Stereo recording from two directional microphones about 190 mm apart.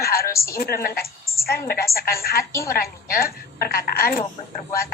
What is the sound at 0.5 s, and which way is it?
A woman's voice, 50° left (ahead or behind).